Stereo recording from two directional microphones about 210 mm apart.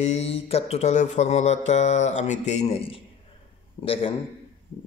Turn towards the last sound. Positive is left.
turn(degrees=25)  # may be behind; listen again after turning